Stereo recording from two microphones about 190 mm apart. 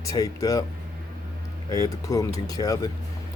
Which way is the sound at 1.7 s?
20° left (ahead or behind).